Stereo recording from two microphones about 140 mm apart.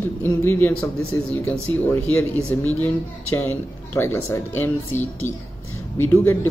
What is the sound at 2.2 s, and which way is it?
Speech, 10° left (ahead or behind).